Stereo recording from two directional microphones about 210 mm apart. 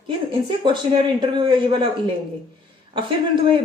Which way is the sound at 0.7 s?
20° right (ahead or behind).